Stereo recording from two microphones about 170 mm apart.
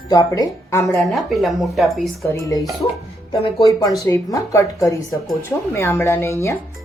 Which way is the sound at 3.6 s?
20° left (ahead or behind).